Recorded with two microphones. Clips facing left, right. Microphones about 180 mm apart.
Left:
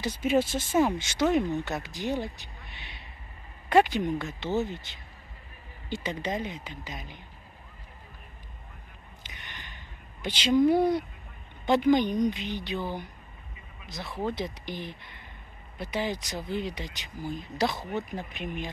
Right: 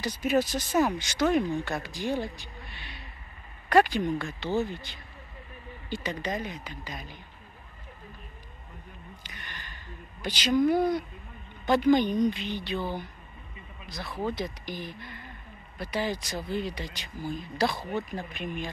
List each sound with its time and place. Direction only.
0.0 s speech: 25° left (ahead or behind)
3.6 s speech: 20° left (ahead or behind)
10.2 s a woman's voice: 25° left (ahead or behind)